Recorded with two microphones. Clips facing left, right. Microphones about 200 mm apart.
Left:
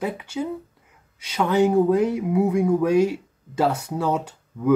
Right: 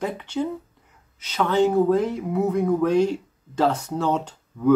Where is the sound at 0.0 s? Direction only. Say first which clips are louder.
Right 1 dB; 10° left (ahead or behind).